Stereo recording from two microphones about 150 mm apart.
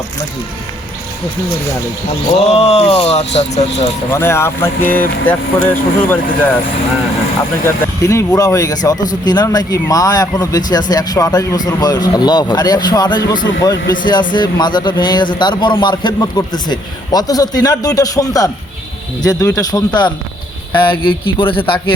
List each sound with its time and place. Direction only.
2.4 s speech: 45° left (ahead or behind)
4.1 s speech: 15° left (ahead or behind)
7.6 s a man's voice: 20° left (ahead or behind)